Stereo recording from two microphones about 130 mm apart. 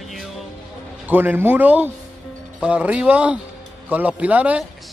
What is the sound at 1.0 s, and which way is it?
A man's voice, 15° right (ahead or behind).